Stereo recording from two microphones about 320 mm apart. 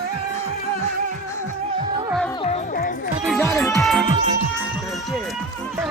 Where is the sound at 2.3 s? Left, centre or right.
Centre.